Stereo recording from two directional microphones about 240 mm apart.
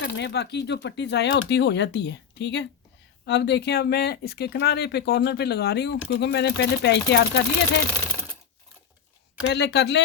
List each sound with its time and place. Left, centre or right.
0.0 s speech: left
9.5 s speech: left